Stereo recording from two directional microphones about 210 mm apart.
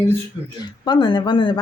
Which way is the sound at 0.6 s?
20° left (ahead or behind).